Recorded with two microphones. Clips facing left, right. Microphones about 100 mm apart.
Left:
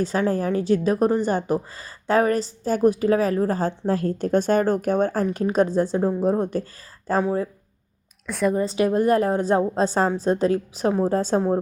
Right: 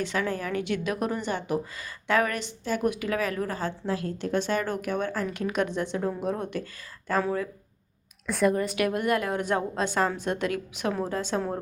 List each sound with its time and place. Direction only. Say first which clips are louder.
0.0 s a woman's voice: left 7 dB; 35° left (ahead or behind)
8.3 s a woman's voice: left 1 dB; centre (ahead or behind)
8.5 s a woman's voice: left 6 dB; 30° left (ahead or behind)